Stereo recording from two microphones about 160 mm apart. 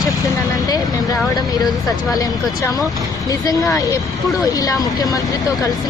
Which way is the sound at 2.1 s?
25° left (ahead or behind).